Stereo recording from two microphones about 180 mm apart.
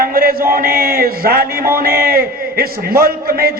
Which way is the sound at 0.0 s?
55° right (ahead or behind).